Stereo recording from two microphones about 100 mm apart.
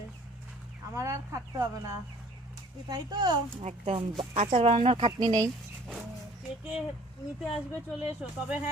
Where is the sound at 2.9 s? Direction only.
45° right (ahead or behind).